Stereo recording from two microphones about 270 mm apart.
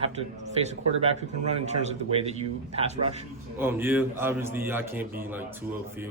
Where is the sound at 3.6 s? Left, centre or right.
Centre.